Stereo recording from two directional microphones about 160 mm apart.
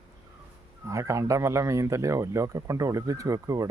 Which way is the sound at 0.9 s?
20° right (ahead or behind).